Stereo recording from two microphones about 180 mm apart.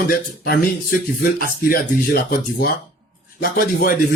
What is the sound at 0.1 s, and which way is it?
Speech, 55° left (ahead or behind).